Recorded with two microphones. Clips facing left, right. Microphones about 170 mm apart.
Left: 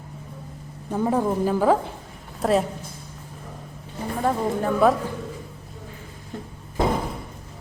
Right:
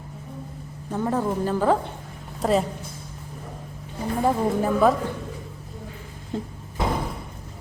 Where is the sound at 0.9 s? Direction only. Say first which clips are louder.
Left 2 dB; 10° left (ahead or behind).